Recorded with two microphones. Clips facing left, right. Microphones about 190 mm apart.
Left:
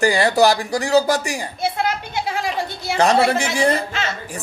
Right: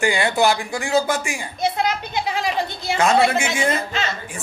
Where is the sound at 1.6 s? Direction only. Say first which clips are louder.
Right 2 dB; 15° right (ahead or behind).